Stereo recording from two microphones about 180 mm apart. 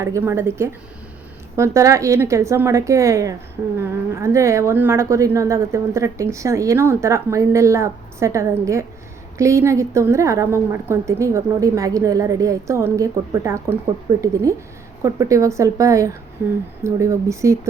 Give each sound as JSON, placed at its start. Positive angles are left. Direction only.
{"t": 0.0, "sound": "a woman's voice", "side_deg": -15}